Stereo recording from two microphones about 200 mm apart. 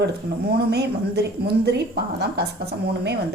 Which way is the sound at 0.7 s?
55° right (ahead or behind).